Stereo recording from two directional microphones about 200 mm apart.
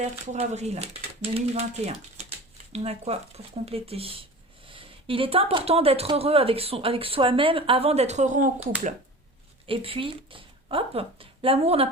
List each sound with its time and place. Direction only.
0.0 s speech: 35° right (ahead or behind)
9.6 s speech: 25° right (ahead or behind)